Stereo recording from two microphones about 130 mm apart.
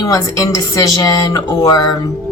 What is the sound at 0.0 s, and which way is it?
Speech, 25° left (ahead or behind).